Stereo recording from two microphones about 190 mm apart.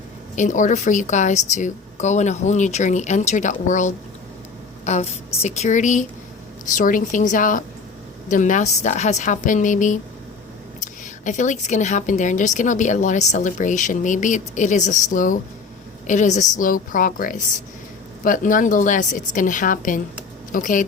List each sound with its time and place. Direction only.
0.3 s a woman's voice: 40° left (ahead or behind)
11.3 s a woman's voice: 40° left (ahead or behind)